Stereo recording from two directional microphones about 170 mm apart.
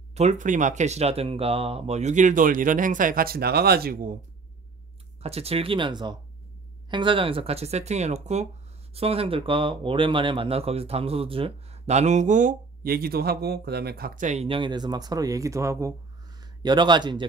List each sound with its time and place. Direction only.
0.1 s speech: 40° right (ahead or behind); by 4.2 s 55° right (ahead or behind)
5.2 s speech: 35° right (ahead or behind); by 14.2 s 65° right (ahead or behind)
14.2 s speech: 40° right (ahead or behind)